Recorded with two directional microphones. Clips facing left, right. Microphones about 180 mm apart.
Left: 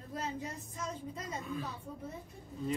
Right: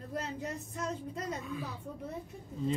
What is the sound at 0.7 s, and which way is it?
Speech, 65° right (ahead or behind).